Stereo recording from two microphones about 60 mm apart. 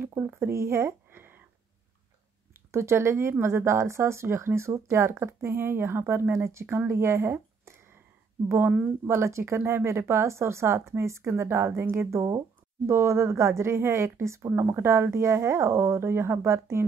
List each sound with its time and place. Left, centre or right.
0.1 s speech: right
1.1 s a sound: right
2.7 s speech: right
9.0 s speech: right